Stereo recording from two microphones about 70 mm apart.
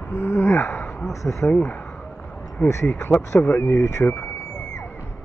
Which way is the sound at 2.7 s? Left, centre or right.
Left.